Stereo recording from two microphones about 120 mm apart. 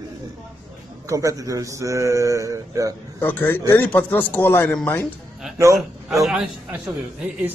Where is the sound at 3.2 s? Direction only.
15° left (ahead or behind).